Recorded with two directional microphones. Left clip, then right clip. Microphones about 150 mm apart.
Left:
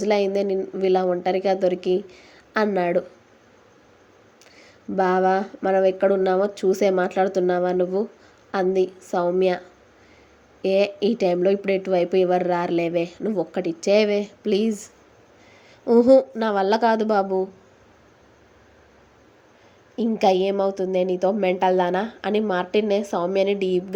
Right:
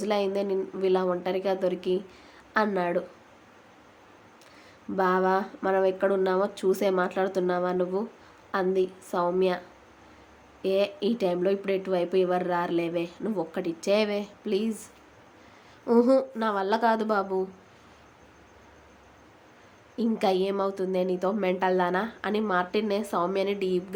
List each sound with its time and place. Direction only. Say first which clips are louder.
0.0 s a woman's voice: left 6 dB; 25° left (ahead or behind)
4.9 s a woman's voice: left 5 dB; 25° left (ahead or behind)
14.4 s speech: left 5 dB; 35° left (ahead or behind)
15.9 s a woman's voice: left 7 dB; 25° left (ahead or behind)
20.0 s a woman's voice: left 6 dB; 20° left (ahead or behind)